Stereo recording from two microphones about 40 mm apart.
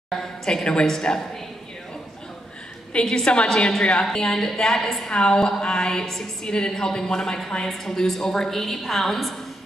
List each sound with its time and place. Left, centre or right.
0.1 s a sound: centre
1.1 s a woman's voice: left
2.9 s a woman's voice: left; by 5.1 s centre
5.1 s a woman's voice: centre